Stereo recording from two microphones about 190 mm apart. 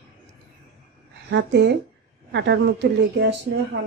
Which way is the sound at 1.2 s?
65° right (ahead or behind).